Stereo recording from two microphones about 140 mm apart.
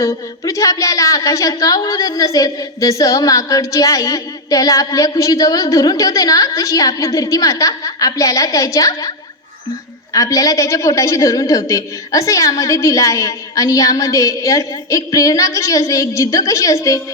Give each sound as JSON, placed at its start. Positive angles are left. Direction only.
{"t": 0.0, "sound": "speech", "side_deg": 25}